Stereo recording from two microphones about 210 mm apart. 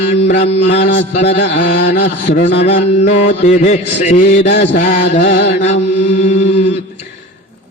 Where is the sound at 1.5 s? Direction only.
60° left (ahead or behind).